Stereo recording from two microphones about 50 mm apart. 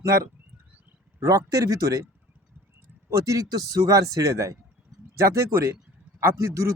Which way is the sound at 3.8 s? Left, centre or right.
Right.